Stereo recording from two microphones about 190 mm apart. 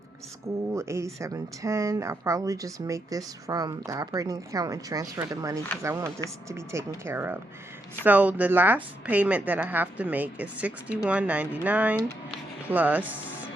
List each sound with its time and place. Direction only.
0.7 s speech: 15° right (ahead or behind)